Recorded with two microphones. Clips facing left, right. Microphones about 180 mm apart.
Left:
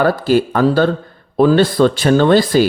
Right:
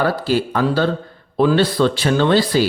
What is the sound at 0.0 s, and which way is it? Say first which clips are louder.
Speech: left 5 dB; 50° left (ahead or behind).